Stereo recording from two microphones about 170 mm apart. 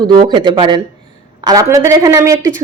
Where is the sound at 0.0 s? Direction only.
25° right (ahead or behind).